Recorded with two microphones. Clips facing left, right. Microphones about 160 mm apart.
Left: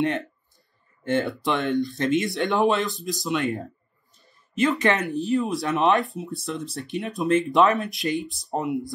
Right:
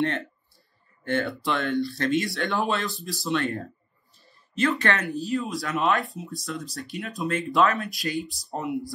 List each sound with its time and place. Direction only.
1.0 s speech: 20° left (ahead or behind)